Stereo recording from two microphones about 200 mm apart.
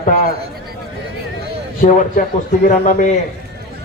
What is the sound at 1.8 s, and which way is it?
A man's voice, 40° left (ahead or behind).